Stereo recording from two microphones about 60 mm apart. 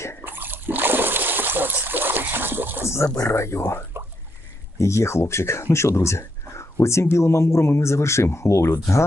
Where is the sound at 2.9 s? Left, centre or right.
Left.